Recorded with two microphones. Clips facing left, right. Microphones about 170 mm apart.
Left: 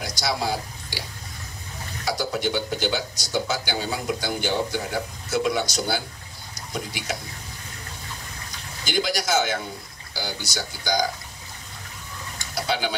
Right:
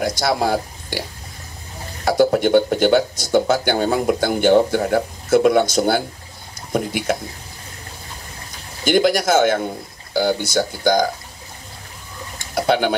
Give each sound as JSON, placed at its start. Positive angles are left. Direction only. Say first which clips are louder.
{"t": 0.0, "sound": "speech", "louder": "right 8 dB", "side_deg": -55}
{"t": 2.0, "sound": "speech", "louder": "right 11 dB", "side_deg": -55}
{"t": 8.8, "sound": "speech", "louder": "right 10 dB", "side_deg": -55}
{"t": 12.5, "sound": "speech", "louder": "right 9 dB", "side_deg": -55}